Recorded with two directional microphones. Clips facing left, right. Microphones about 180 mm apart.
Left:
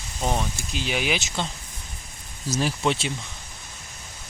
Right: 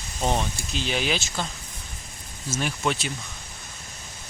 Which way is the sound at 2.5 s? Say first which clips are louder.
Left 3 dB; 35° left (ahead or behind).